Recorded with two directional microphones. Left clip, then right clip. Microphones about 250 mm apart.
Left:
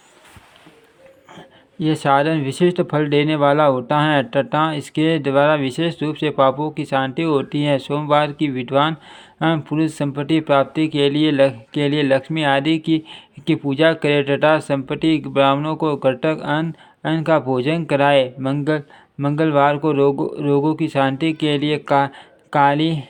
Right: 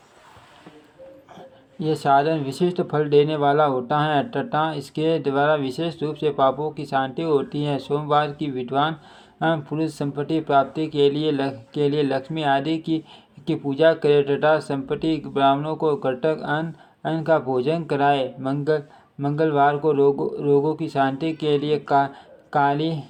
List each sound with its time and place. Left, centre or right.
1.8 s speech: left
21.9 s a sound: left
22.7 s speech: left